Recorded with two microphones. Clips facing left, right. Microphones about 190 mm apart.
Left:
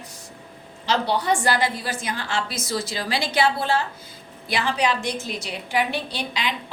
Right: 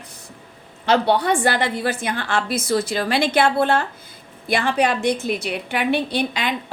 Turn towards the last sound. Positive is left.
turn(degrees=-55)  # may be behind; listen again after turning